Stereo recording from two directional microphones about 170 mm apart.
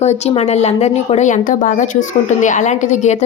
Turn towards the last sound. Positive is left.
turn(degrees=45)  # may be behind; listen again after turning